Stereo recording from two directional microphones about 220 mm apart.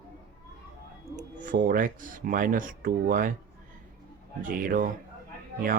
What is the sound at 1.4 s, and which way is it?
Speech, 35° right (ahead or behind).